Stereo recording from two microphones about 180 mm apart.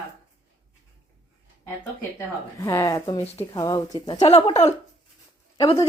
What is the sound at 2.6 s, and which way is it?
Speech, 20° left (ahead or behind).